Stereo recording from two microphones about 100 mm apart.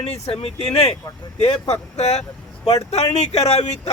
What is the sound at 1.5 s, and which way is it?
Speech, 75° left (ahead or behind).